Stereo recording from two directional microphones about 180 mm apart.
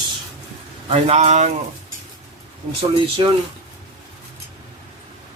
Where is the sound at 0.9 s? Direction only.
40° right (ahead or behind).